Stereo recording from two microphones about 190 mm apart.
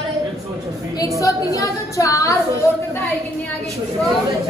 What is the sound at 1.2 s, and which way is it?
Speech, 15° left (ahead or behind).